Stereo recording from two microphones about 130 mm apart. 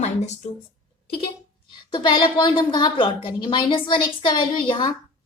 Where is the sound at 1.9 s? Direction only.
35° left (ahead or behind).